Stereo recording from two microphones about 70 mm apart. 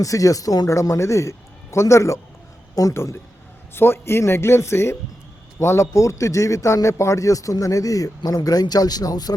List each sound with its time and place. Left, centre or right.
0.0 s speech: left
0.7 s a man's voice: left